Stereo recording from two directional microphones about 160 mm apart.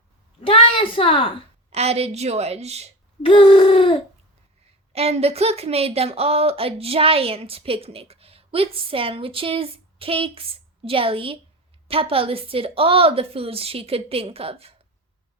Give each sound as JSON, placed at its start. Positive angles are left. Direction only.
{"t": 0.4, "sound": "a woman's voice", "side_deg": 35}
{"t": 1.7, "sound": "speech", "side_deg": -40}
{"t": 3.2, "sound": "a sound", "side_deg": 35}
{"t": 4.9, "sound": "speech", "side_deg": -40}